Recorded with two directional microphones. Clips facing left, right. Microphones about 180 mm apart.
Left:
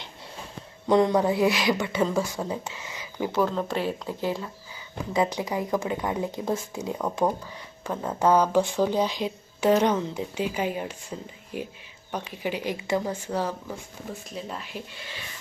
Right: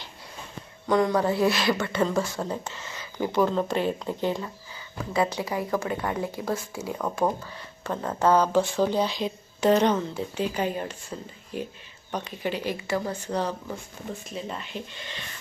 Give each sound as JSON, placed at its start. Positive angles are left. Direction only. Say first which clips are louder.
{"t": 0.9, "sound": "speech", "louder": "left 2 dB", "side_deg": 25}
{"t": 3.2, "sound": "speech", "louder": "right 2 dB", "side_deg": 0}
{"t": 5.1, "sound": "speech", "louder": "even", "side_deg": 15}